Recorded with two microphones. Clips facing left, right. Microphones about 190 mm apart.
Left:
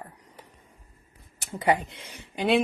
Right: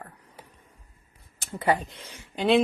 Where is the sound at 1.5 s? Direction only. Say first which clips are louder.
Left 1 dB; 20° left (ahead or behind).